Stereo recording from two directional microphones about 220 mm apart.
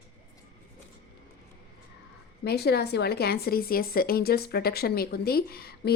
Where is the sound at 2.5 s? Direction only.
45° left (ahead or behind).